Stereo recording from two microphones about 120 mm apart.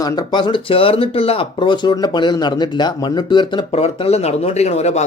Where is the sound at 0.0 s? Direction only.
35° left (ahead or behind).